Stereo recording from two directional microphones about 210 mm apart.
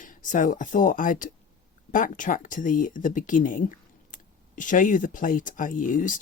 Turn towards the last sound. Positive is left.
turn(degrees=40)  # may be behind; listen again after turning